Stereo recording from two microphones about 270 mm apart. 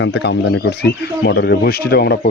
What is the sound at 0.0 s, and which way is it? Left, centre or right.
Speech, left.